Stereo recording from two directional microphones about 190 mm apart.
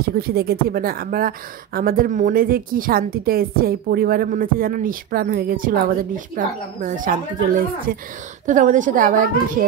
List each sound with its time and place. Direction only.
0.0 s speech: 55° right (ahead or behind)